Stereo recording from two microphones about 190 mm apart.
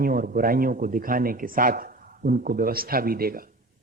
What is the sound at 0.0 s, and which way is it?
Speech, 50° right (ahead or behind).